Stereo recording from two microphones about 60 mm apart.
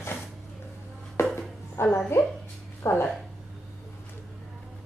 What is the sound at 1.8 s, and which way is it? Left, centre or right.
A woman's voice, left.